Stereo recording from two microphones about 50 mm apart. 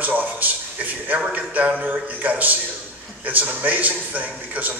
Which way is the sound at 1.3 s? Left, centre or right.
Right.